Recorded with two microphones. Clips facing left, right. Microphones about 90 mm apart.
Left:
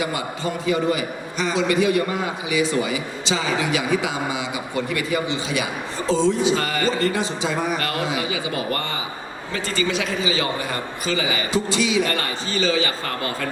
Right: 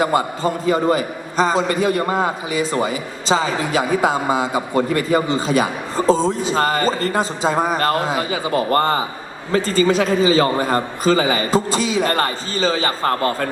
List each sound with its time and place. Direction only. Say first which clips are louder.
0.0 s a man's voice: right 7 dB; 40° right (ahead or behind)